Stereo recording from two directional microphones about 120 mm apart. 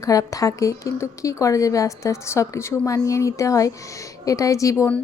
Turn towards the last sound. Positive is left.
turn(degrees=25)  # may be behind; listen again after turning